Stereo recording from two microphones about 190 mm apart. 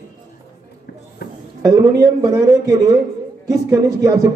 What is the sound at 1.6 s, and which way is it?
A man's voice, 15° right (ahead or behind).